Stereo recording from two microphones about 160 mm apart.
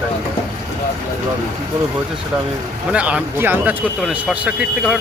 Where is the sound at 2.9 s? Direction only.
10° right (ahead or behind).